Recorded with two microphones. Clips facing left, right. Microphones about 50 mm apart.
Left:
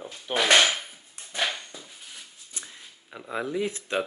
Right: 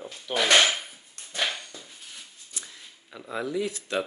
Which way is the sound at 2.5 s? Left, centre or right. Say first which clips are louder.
Even; left.